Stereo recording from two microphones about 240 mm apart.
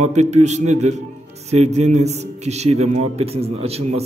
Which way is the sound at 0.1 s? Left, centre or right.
Right.